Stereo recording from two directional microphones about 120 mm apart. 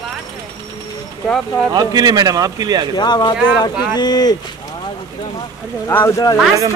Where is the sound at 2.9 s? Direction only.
35° left (ahead or behind).